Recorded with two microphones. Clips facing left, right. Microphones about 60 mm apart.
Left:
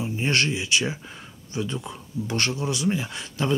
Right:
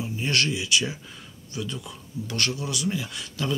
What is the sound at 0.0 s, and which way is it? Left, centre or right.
Speech, left.